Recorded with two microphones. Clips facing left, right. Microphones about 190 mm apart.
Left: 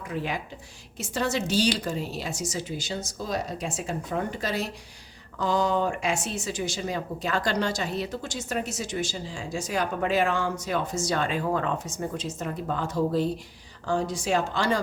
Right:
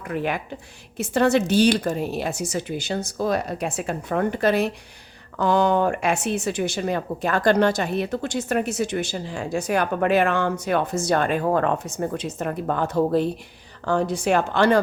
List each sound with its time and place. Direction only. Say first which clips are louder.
0.1 s speech: right 6 dB; 60° right (ahead or behind)